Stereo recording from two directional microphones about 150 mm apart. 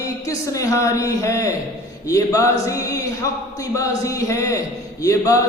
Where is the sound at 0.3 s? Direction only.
25° left (ahead or behind).